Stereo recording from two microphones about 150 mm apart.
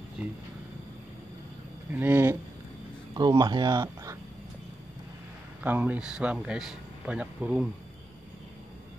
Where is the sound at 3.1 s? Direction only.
30° right (ahead or behind).